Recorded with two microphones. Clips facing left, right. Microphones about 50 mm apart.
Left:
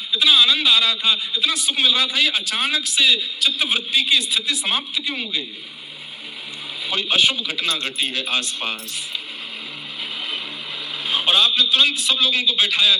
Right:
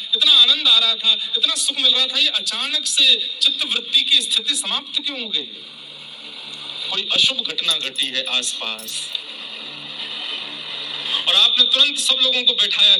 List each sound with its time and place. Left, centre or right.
0.2 s a man's voice: centre
6.9 s a man's voice: centre
7.2 s a man's voice: left
11.0 s vehicle: left
11.3 s a man's voice: centre